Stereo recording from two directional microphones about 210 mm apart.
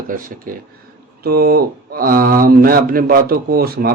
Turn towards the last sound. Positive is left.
turn(degrees=-45)  # may be behind; listen again after turning